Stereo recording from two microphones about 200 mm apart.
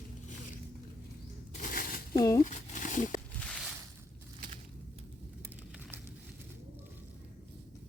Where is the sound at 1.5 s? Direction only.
45° left (ahead or behind).